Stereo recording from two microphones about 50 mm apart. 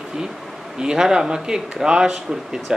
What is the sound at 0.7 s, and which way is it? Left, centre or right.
Speech, centre.